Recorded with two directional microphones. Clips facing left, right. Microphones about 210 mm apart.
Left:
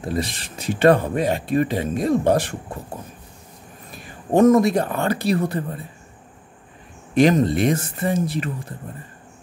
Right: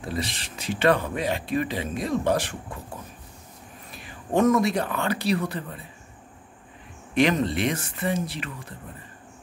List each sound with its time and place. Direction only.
0.1 s speech: 50° left (ahead or behind)
3.9 s speech: 45° left (ahead or behind)
7.2 s speech: 40° left (ahead or behind)